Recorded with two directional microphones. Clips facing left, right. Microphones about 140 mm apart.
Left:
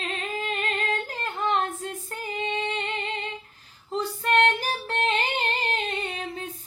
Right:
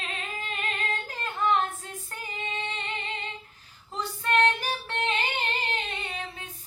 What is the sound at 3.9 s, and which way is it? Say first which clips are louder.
Female singing: left 3 dB; 30° left (ahead or behind).